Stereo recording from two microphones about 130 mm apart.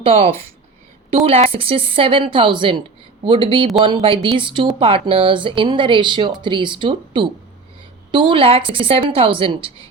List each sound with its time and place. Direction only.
0.0 s a woman's voice: 50° right (ahead or behind)